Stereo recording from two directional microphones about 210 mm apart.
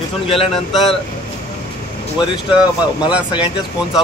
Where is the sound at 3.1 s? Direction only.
5° right (ahead or behind).